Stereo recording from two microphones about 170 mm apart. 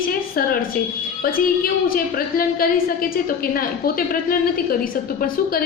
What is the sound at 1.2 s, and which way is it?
A woman's voice, 60° left (ahead or behind).